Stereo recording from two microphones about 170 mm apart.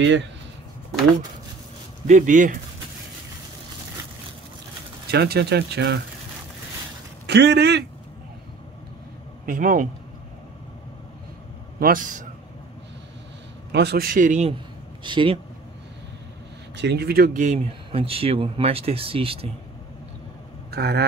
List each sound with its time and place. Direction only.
0.0 s speech: 90° right
2.0 s speech: 45° right (ahead or behind)
5.1 s speech: 70° right (ahead or behind)
7.2 s a man's voice: 80° right
9.5 s speech: 55° right (ahead or behind)
11.8 s speech: 50° right (ahead or behind)
13.7 s a man's voice: 80° right; by 14.5 s 45° right (ahead or behind)
15.0 s speech: 30° right (ahead or behind)
16.7 s speech: 80° right; by 19.5 s 35° right (ahead or behind)
20.7 s speech: 70° right (ahead or behind)